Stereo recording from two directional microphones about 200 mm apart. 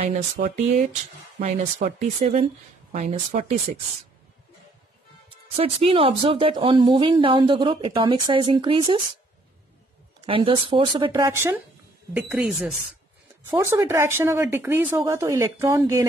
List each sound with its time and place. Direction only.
0.0 s speech: 35° right (ahead or behind)
5.6 s a woman's voice: 30° right (ahead or behind)
10.2 s a woman's voice: 25° right (ahead or behind)
12.1 s speech: centre (ahead or behind)